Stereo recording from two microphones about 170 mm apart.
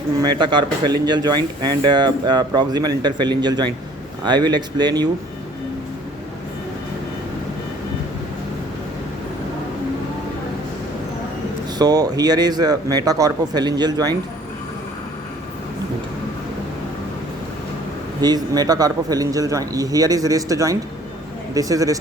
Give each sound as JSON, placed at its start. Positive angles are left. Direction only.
{"t": 0.2, "sound": "speech", "side_deg": -25}
{"t": 11.8, "sound": "speech", "side_deg": -20}
{"t": 18.2, "sound": "speech", "side_deg": -25}